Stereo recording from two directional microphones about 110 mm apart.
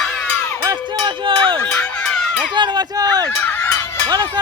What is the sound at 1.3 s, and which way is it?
Music, 50° right (ahead or behind).